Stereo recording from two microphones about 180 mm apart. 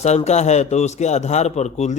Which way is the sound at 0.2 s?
40° left (ahead or behind).